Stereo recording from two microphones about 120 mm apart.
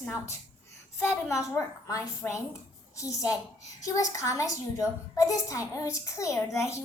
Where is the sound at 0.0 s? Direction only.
20° left (ahead or behind).